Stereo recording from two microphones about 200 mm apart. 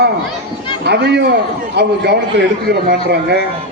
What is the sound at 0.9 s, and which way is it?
Speech, 55° right (ahead or behind).